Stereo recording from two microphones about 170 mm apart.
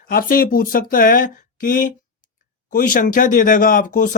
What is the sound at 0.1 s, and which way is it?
Speech, 55° left (ahead or behind).